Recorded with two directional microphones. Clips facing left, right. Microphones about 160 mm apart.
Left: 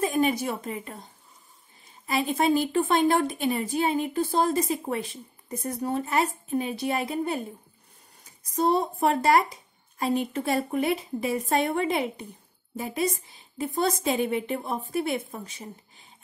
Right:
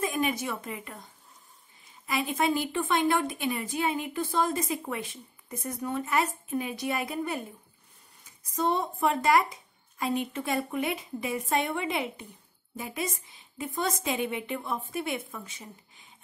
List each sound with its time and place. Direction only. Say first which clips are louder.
0.0 s a woman's voice: left 5 dB; 35° left (ahead or behind)
8.5 s a woman's voice: left 4 dB; 35° left (ahead or behind)